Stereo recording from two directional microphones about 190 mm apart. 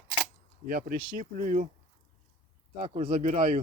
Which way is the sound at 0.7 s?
50° right (ahead or behind).